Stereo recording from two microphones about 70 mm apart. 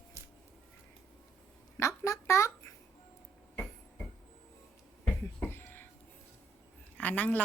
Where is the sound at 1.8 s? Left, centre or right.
Left.